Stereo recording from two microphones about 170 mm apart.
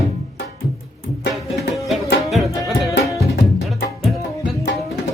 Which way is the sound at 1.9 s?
Centre (ahead or behind).